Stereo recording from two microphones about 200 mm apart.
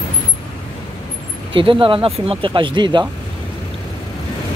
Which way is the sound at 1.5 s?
25° right (ahead or behind).